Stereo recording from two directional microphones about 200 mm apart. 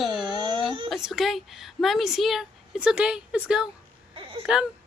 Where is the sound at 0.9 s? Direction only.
Centre (ahead or behind).